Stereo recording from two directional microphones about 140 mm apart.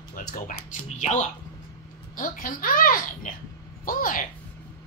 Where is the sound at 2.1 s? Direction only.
75° left (ahead or behind).